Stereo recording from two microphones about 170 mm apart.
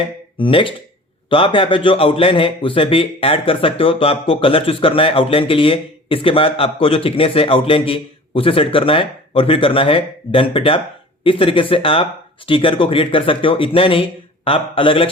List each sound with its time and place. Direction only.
0.3 s a man's voice: 30° left (ahead or behind)